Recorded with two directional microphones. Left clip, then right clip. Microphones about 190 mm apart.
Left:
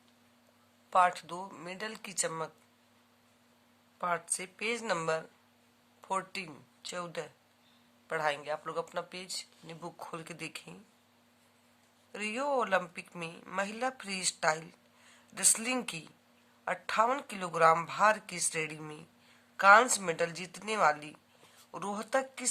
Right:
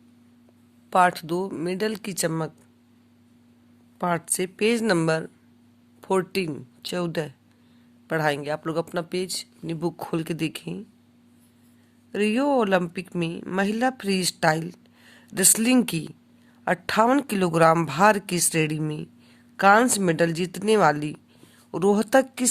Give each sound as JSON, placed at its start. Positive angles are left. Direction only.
{"t": 0.9, "sound": "a woman's voice", "side_deg": -45}
{"t": 3.9, "sound": "a woman's voice", "side_deg": -45}
{"t": 12.1, "sound": "a woman's voice", "side_deg": -40}